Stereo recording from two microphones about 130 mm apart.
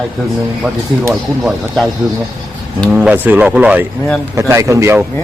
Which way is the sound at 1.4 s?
Centre (ahead or behind).